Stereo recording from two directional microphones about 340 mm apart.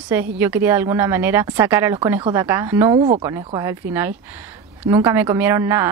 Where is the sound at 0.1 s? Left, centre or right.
Centre.